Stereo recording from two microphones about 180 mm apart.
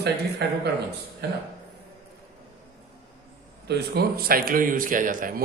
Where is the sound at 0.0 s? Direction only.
65° right (ahead or behind).